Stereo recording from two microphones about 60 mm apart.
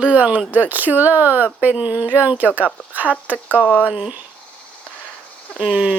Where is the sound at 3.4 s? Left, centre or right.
Left.